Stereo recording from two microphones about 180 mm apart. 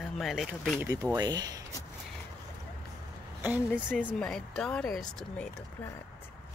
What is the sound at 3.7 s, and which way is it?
Speech, 5° left (ahead or behind).